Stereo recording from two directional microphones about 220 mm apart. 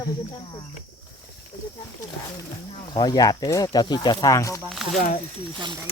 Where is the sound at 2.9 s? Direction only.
20° left (ahead or behind).